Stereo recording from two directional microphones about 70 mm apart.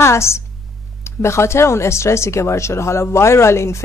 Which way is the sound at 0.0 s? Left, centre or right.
Left.